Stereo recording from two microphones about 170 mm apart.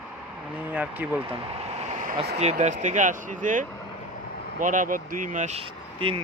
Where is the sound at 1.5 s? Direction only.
40° right (ahead or behind).